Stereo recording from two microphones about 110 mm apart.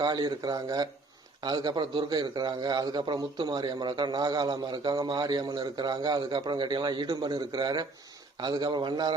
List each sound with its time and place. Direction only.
0.0 s a man's voice: 40° right (ahead or behind)